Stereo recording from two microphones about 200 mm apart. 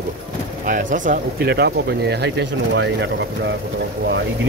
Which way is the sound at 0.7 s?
40° right (ahead or behind).